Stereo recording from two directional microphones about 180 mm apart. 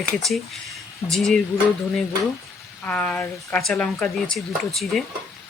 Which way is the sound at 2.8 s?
5° left (ahead or behind).